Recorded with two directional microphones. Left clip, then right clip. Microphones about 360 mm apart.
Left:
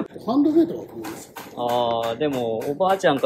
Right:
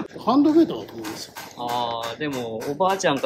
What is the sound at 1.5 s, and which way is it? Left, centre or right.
Speech, centre.